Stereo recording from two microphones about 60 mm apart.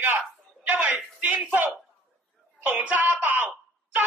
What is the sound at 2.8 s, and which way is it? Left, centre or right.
Speech, right.